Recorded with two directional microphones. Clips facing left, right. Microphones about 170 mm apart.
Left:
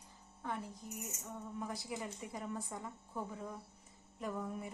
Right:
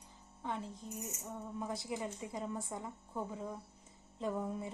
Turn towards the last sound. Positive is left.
turn(degrees=-25)  # may be behind; listen again after turning